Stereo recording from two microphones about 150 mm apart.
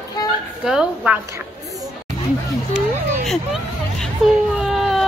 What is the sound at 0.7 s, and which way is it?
Speech, 5° right (ahead or behind).